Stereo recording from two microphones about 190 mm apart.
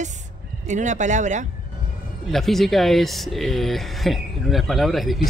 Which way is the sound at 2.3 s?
Centre (ahead or behind).